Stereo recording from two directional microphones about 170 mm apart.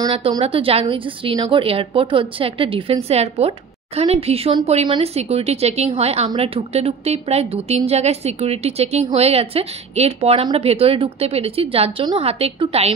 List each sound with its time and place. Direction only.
0.4 s a woman's voice: 35° right (ahead or behind)